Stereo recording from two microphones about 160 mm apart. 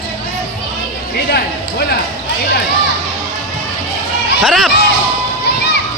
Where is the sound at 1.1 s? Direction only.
85° left.